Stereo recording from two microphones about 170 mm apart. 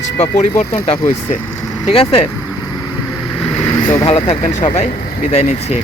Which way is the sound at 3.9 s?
20° left (ahead or behind).